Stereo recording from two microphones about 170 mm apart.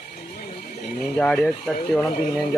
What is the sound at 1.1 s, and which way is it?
Speech, 5° left (ahead or behind).